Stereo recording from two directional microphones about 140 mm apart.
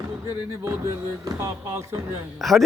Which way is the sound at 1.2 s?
20° right (ahead or behind).